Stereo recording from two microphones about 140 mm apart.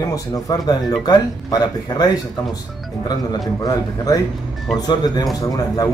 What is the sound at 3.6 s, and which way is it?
Speech, 25° left (ahead or behind).